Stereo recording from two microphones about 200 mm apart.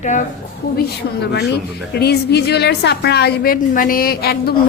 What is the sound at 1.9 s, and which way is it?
A woman's voice, 55° left (ahead or behind).